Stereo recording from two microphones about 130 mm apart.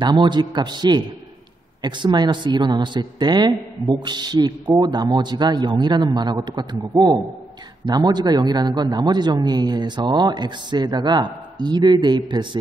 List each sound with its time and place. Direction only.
0.0 s a man's voice: 35° right (ahead or behind)
7.8 s a man's voice: 35° right (ahead or behind)